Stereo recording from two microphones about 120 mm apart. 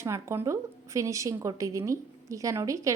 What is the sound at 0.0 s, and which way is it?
A woman's voice, 25° right (ahead or behind).